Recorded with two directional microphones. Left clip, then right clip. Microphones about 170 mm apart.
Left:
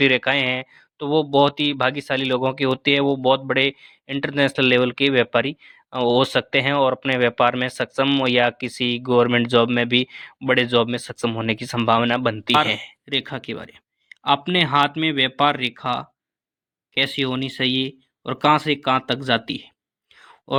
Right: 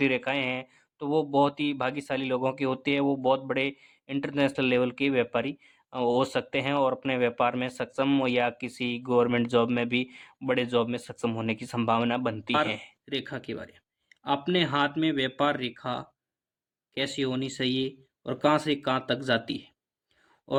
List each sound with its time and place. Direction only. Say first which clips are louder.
0.0 s speech: left 9 dB; 20° left (ahead or behind)